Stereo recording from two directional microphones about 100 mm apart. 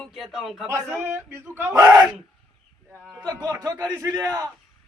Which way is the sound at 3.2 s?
40° right (ahead or behind).